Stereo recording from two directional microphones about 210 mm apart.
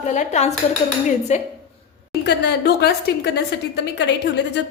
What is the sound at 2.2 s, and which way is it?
Speech, 55° left (ahead or behind).